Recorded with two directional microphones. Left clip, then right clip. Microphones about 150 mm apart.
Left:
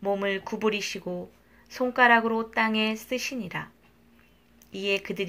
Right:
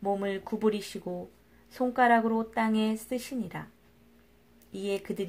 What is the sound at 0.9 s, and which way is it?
Speech, 25° right (ahead or behind).